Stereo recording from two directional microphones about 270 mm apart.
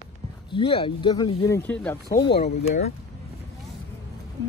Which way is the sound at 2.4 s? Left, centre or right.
Left.